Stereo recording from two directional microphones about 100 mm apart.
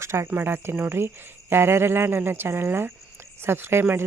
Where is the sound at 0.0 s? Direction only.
30° right (ahead or behind).